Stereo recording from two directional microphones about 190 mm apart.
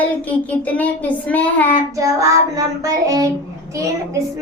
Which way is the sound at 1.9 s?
15° right (ahead or behind).